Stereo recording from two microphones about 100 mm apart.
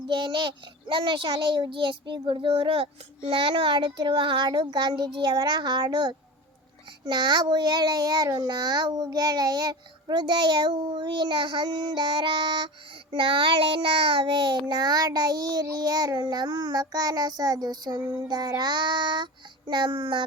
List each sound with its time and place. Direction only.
0.1 s a child's voice: 55° right (ahead or behind)